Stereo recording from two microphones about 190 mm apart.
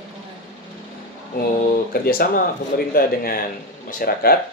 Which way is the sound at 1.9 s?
50° left (ahead or behind).